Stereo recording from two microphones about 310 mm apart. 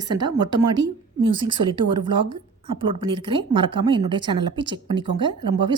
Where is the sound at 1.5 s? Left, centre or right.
Centre.